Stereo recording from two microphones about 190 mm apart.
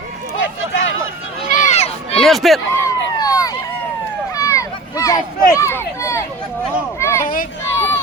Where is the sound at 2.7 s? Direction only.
15° left (ahead or behind).